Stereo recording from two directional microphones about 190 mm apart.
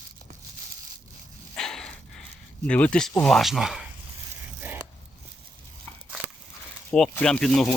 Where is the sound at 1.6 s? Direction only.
5° left (ahead or behind).